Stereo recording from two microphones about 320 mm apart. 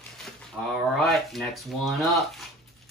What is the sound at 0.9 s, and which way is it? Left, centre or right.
Speech, centre.